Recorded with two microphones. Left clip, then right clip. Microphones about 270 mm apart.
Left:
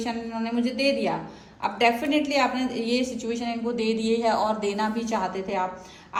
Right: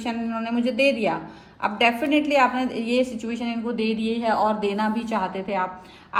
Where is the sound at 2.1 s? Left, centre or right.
Centre.